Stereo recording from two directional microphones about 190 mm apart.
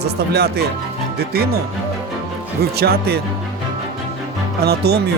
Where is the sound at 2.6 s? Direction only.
55° right (ahead or behind).